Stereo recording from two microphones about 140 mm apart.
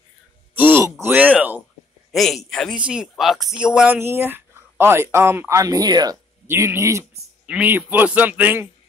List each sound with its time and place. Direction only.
0.6 s groan: 15° right (ahead or behind)
1.0 s speech: 10° right (ahead or behind)
2.1 s speech: centre (ahead or behind); by 6.1 s 30° right (ahead or behind)
6.4 s speech: 15° right (ahead or behind)